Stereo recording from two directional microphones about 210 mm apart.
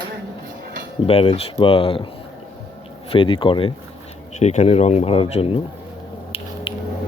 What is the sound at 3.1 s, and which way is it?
Speech, 25° left (ahead or behind).